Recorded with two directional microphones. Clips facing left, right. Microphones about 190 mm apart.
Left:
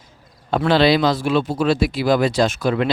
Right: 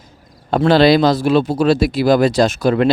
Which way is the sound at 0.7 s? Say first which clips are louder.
Right 4 dB; 40° right (ahead or behind).